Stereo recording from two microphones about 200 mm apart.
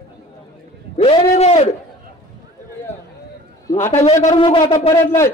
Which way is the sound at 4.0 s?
35° left (ahead or behind).